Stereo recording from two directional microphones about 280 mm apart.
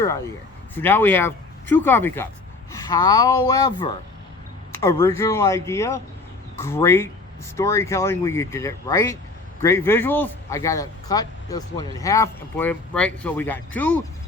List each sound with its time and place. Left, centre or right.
0.8 s speech: centre